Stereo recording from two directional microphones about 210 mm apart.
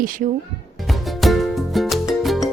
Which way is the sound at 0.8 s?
Centre (ahead or behind).